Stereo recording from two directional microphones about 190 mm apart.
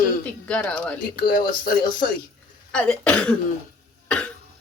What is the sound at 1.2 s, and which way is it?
Speech, 45° left (ahead or behind).